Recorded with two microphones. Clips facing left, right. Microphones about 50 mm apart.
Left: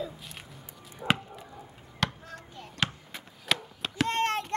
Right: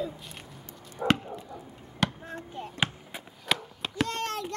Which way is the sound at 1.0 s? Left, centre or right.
Right.